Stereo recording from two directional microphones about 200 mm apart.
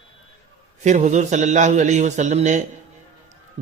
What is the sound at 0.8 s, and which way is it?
A man's voice, 35° right (ahead or behind).